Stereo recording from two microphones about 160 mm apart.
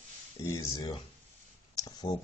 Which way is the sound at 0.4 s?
20° left (ahead or behind).